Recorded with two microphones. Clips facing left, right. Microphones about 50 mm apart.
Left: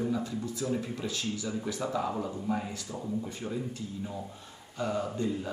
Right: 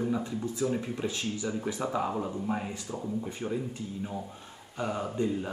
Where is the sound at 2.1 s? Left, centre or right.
Centre.